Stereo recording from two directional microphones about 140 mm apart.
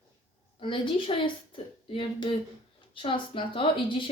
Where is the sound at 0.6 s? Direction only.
35° left (ahead or behind).